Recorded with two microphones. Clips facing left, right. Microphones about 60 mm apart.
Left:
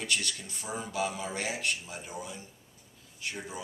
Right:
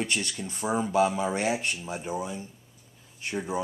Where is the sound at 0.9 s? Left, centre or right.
Right.